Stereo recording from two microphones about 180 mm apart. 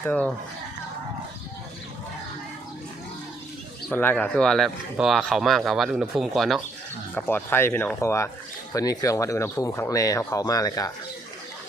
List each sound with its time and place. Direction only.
0.0 s speech: 5° left (ahead or behind)
3.8 s speech: 10° left (ahead or behind)
7.2 s speech: 10° left (ahead or behind)